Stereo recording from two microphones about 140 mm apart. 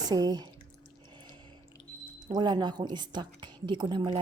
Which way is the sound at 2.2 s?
30° right (ahead or behind).